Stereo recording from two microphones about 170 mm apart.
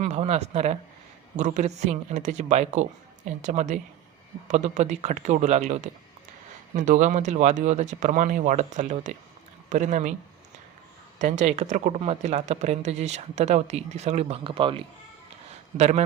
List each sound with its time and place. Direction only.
0.0 s speech: 40° right (ahead or behind)
11.2 s speech: 45° right (ahead or behind); by 14.8 s 30° right (ahead or behind)
15.8 s speech: 40° right (ahead or behind)